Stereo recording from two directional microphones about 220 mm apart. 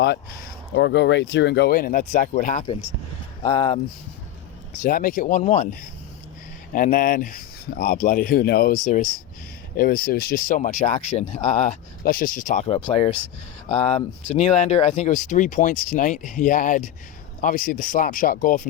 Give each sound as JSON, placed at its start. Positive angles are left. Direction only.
{"t": 0.7, "sound": "speech", "side_deg": 50}
{"t": 4.8, "sound": "speech", "side_deg": 40}
{"t": 6.7, "sound": "speech", "side_deg": 40}
{"t": 12.0, "sound": "speech", "side_deg": 40}
{"t": 12.6, "sound": "speech", "side_deg": 25}